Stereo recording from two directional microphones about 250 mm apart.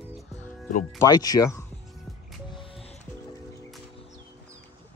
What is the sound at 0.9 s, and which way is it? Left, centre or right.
Speech, centre.